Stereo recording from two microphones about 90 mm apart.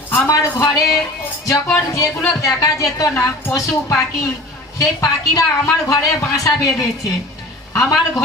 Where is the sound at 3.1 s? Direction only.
25° left (ahead or behind).